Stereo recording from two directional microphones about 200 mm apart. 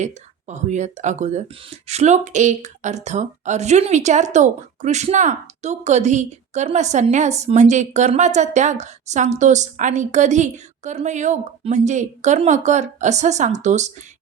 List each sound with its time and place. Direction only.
0.0 s speech: 35° right (ahead or behind)